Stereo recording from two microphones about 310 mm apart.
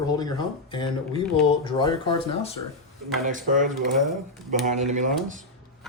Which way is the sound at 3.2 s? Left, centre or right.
Right.